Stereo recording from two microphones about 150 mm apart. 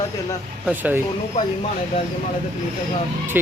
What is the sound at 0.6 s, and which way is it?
Speech, 10° right (ahead or behind).